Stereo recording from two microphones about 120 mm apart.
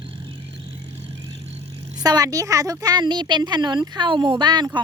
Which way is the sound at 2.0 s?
30° right (ahead or behind).